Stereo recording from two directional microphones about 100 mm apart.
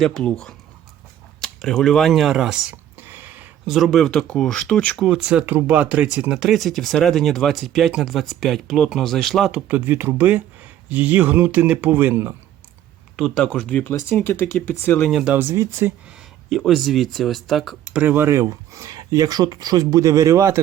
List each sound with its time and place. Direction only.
0.0 s speech: 5° left (ahead or behind)
3.0 s a sound: 20° right (ahead or behind)
3.7 s speech: centre (ahead or behind)
5.0 s a man's voice: 10° right (ahead or behind)
6.3 s speech: 5° right (ahead or behind)
9.5 s a man's voice: 10° right (ahead or behind)
13.3 s speech: 10° left (ahead or behind)
15.1 s a man's voice: 10° right (ahead or behind)
15.4 s speech: 25° right (ahead or behind)
16.5 s speech: centre (ahead or behind)
17.9 s speech: 20° right (ahead or behind)